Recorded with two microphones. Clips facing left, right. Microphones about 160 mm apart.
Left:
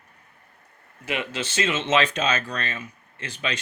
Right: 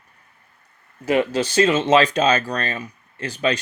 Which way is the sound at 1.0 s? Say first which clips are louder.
Right 10 dB; 40° right (ahead or behind).